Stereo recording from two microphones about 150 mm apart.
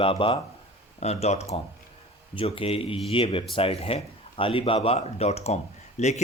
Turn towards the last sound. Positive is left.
turn(degrees=50)  # may be behind; listen again after turning